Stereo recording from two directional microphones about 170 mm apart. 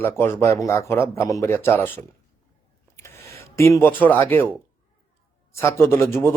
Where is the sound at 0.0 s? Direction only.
15° left (ahead or behind).